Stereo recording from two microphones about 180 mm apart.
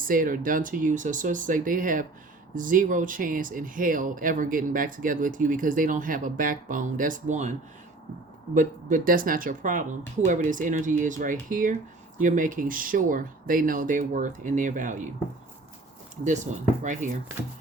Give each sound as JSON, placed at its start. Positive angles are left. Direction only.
{"t": 0.0, "sound": "speech", "side_deg": -50}
{"t": 8.5, "sound": "speech", "side_deg": -50}
{"t": 16.8, "sound": "speech", "side_deg": -45}